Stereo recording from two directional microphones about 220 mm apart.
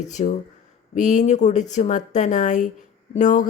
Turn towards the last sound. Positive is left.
turn(degrees=35)  # may be behind; listen again after turning